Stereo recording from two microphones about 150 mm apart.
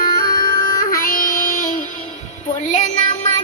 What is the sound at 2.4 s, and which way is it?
Music, 55° left (ahead or behind).